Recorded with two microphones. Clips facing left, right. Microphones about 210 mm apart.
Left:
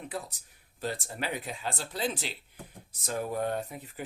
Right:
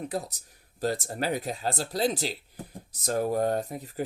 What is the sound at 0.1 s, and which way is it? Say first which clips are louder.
Speech: right 5 dB; 40° right (ahead or behind).